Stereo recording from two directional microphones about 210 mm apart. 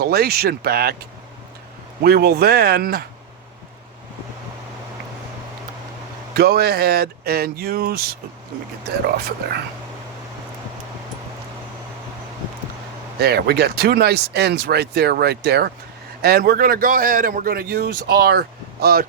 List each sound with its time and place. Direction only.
0.0 s a man's voice: 50° right (ahead or behind)
6.3 s a man's voice: 50° right (ahead or behind)
9.4 s a man's voice: 50° right (ahead or behind)
13.1 s a man's voice: 50° right (ahead or behind)